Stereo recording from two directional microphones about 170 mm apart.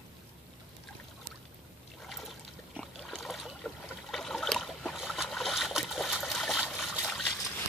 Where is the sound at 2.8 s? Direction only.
Centre (ahead or behind).